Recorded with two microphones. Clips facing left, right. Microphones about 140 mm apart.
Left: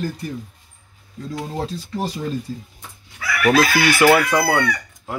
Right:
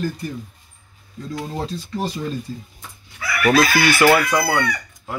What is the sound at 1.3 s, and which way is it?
Speech, 10° left (ahead or behind).